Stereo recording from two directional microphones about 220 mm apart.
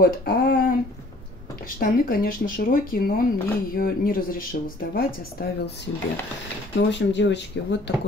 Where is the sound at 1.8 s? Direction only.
40° left (ahead or behind).